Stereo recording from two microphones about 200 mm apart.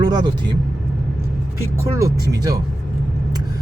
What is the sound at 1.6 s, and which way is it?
Speech, 15° right (ahead or behind).